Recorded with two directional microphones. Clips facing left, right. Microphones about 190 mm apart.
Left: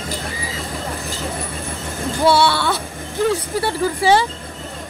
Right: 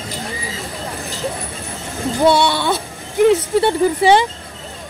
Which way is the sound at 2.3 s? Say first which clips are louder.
Even; 20° right (ahead or behind).